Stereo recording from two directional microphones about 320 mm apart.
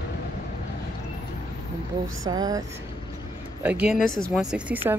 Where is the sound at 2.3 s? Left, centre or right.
Centre.